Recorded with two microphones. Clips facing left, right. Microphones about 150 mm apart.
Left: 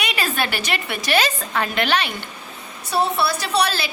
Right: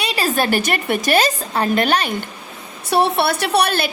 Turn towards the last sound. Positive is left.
turn(degrees=-55)  # may be behind; listen again after turning